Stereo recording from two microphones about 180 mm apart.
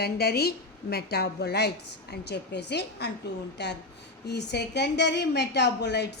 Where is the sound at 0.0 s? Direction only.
60° left (ahead or behind).